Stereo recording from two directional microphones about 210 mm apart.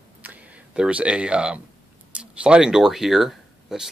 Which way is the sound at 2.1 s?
5° right (ahead or behind).